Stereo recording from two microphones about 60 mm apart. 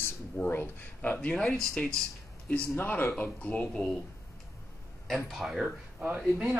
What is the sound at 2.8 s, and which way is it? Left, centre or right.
Speech, left.